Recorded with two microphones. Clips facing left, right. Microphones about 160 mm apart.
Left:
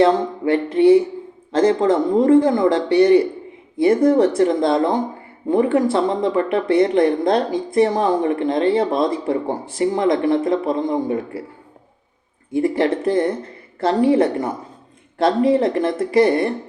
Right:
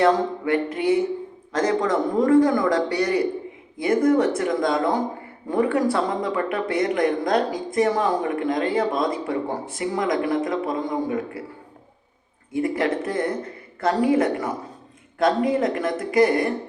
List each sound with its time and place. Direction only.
0.0 s speech: 30° left (ahead or behind)
12.5 s speech: 30° left (ahead or behind)